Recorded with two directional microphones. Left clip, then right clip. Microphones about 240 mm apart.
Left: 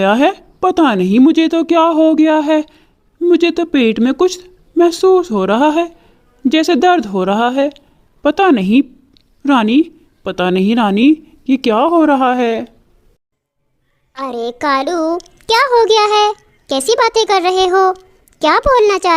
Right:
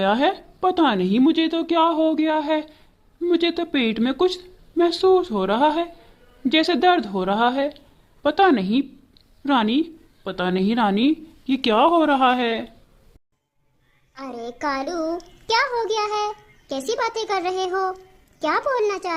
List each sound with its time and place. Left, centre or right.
0.0 s a child's voice: left
14.1 s a child's voice: left